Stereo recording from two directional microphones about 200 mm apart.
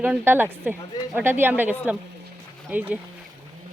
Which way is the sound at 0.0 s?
10° right (ahead or behind).